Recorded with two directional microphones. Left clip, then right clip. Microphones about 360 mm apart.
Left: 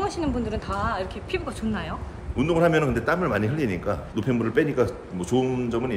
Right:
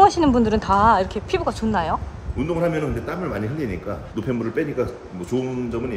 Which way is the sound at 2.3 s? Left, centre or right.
Centre.